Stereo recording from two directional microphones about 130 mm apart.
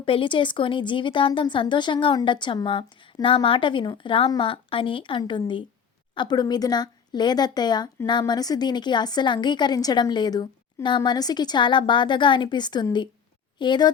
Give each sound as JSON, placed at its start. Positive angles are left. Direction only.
{"t": 0.0, "sound": "speech", "side_deg": 40}